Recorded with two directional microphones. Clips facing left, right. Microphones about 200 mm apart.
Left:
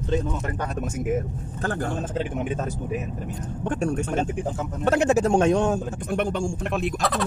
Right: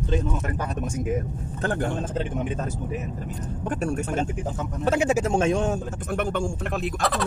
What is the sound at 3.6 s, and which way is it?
Speech, 5° right (ahead or behind).